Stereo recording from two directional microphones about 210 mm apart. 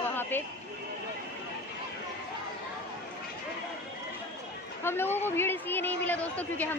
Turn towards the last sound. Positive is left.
turn(degrees=10)  # may be behind; listen again after turning